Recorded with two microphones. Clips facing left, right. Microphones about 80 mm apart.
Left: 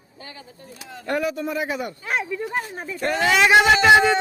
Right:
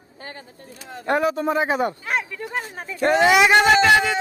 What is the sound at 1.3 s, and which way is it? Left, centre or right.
Speech, right.